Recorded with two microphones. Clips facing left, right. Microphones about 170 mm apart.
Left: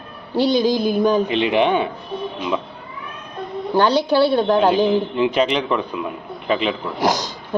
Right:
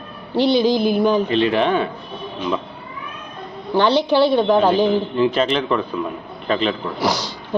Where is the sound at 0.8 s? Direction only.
15° left (ahead or behind).